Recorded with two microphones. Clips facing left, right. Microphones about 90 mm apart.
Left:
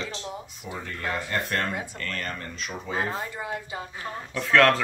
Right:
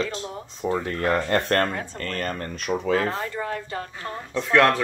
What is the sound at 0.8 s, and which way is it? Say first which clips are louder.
Speech: right 4 dB; 65° right (ahead or behind).